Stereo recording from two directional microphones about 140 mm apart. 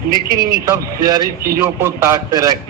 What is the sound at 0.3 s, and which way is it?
Speech, 90° right.